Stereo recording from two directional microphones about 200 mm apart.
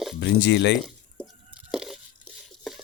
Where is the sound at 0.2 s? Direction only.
60° left (ahead or behind).